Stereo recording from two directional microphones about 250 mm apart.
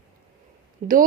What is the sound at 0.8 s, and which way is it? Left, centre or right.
Speech, right.